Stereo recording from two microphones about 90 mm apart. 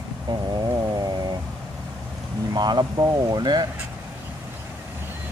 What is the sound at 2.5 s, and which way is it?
Speech, 50° right (ahead or behind).